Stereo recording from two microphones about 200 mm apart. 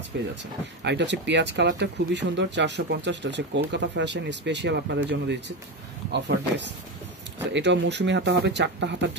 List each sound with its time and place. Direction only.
0.1 s speech: 60° right (ahead or behind)